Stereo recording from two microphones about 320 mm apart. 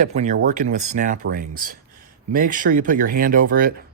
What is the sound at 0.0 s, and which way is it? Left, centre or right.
Speech, right.